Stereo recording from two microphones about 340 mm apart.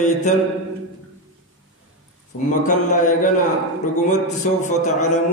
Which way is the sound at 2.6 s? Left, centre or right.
Left.